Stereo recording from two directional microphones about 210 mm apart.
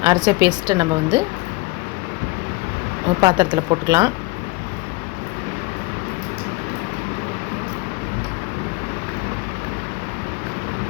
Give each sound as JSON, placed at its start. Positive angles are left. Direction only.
{"t": 0.0, "sound": "a woman's voice", "side_deg": -15}
{"t": 3.2, "sound": "speech", "side_deg": -20}